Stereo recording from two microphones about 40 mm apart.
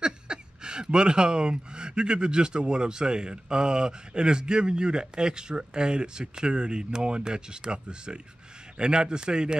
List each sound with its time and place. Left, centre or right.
0.0 s speech: right